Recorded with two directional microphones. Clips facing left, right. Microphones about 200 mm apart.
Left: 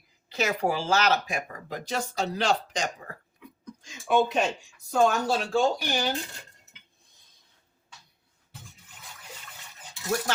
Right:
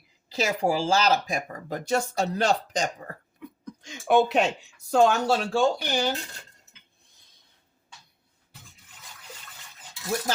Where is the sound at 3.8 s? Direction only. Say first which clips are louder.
Right 3 dB; 70° right (ahead or behind).